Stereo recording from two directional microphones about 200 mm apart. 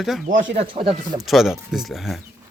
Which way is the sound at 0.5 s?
25° right (ahead or behind).